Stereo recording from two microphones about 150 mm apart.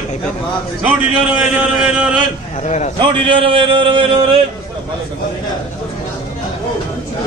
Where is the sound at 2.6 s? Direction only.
50° left (ahead or behind).